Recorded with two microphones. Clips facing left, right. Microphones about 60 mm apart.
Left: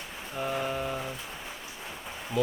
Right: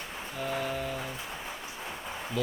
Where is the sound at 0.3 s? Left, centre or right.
Left.